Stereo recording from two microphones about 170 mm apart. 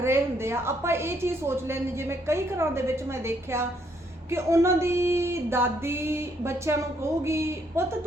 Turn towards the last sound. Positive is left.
turn(degrees=-15)  # may be behind; listen again after turning